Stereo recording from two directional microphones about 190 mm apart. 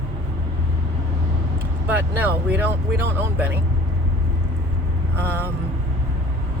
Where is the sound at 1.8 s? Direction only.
10° right (ahead or behind).